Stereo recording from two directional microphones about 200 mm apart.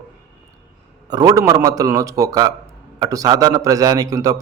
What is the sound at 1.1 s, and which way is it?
A man's voice, 20° right (ahead or behind).